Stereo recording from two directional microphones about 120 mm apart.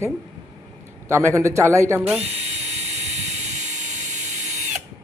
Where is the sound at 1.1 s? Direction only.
25° right (ahead or behind).